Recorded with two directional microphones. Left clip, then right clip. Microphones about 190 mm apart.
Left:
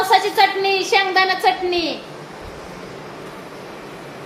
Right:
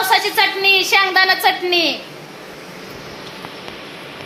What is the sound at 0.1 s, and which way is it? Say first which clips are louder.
A woman's voice: left 1 dB; 20° right (ahead or behind).